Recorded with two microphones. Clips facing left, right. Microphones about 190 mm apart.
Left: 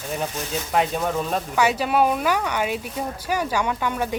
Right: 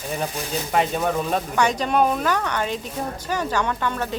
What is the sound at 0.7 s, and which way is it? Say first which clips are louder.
Speech: right 1 dB; centre (ahead or behind).